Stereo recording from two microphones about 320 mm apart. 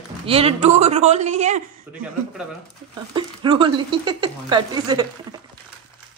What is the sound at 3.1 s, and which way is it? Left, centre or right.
Speech, centre.